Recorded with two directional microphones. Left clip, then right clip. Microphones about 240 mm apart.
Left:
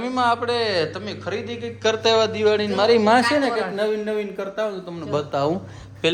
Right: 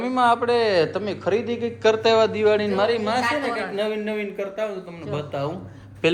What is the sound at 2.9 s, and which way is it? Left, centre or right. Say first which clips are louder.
Speech: left 7 dB; left.